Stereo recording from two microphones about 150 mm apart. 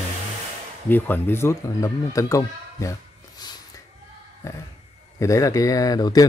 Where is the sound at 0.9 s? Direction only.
15° left (ahead or behind).